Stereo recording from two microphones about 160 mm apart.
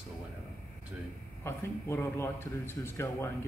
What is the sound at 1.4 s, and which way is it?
A man's voice, 15° left (ahead or behind).